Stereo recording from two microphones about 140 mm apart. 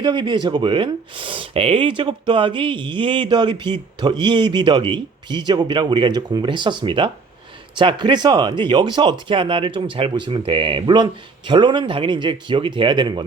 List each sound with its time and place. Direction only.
0.0 s speech: 35° right (ahead or behind)